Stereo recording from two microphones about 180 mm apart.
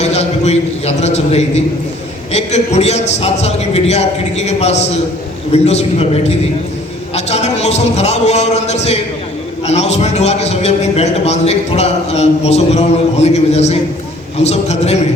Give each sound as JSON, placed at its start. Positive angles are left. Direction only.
{"t": 0.0, "sound": "a man's voice", "side_deg": 35}